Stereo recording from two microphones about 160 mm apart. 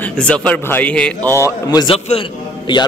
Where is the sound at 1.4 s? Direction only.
25° left (ahead or behind).